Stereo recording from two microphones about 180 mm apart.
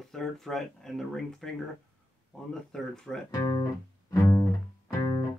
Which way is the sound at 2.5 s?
5° left (ahead or behind).